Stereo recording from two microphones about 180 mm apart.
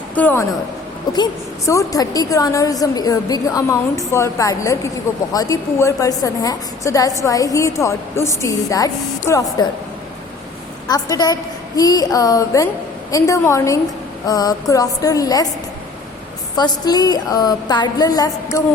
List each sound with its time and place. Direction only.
0.1 s a woman's voice: 10° left (ahead or behind)
1.1 s a woman's voice: 20° left (ahead or behind)
10.8 s a woman's voice: 20° left (ahead or behind)
16.6 s a woman's voice: 20° left (ahead or behind)